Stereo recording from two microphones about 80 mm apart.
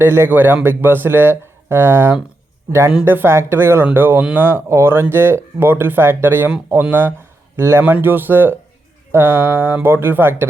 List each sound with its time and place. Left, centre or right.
0.0 s speech: right
7.5 s speech: right